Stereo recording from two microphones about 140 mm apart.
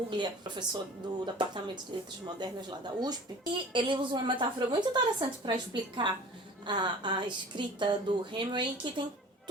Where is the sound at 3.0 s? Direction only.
30° right (ahead or behind).